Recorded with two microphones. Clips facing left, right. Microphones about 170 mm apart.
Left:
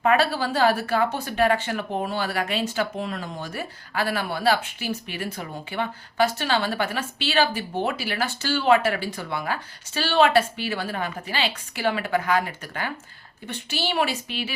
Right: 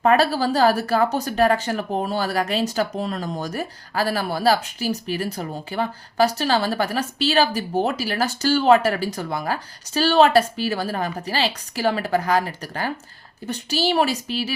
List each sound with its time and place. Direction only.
0.0 s speech: 40° right (ahead or behind)